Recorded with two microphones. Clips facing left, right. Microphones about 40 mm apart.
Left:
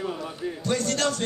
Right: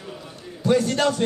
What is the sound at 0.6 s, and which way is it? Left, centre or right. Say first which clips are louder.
Speech: right 6 dB; centre.